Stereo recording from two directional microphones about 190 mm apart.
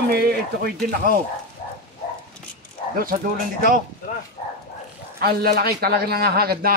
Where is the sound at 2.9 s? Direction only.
50° right (ahead or behind).